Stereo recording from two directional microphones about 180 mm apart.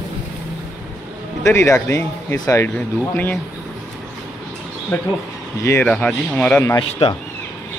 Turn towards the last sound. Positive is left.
turn(degrees=35)  # may be behind; listen again after turning